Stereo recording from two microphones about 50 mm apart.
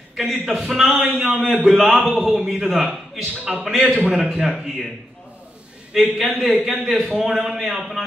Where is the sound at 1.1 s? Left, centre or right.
Right.